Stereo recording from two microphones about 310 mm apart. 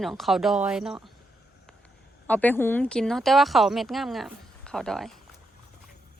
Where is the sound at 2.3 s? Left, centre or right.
Centre.